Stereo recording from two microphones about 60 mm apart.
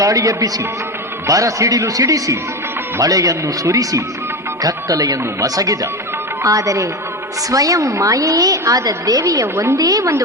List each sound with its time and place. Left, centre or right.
0.0 s a woman's voice: right
6.4 s a woman's voice: right
7.5 s a woman's voice: right
9.8 s a woman's voice: right